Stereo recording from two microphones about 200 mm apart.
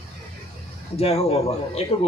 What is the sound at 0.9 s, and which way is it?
Speech, 30° left (ahead or behind).